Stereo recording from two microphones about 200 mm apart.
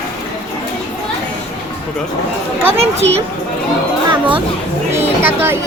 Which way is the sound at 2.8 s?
30° right (ahead or behind).